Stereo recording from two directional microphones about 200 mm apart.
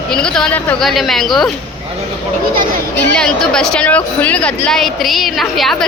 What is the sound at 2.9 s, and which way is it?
A woman's voice, 10° left (ahead or behind).